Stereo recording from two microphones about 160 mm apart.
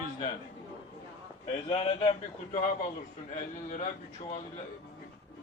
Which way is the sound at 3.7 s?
50° left (ahead or behind).